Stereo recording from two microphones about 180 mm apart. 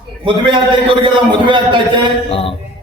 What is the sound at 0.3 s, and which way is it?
A man's voice, 30° right (ahead or behind).